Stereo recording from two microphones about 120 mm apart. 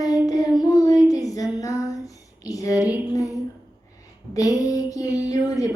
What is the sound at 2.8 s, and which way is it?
Female singing, 15° right (ahead or behind).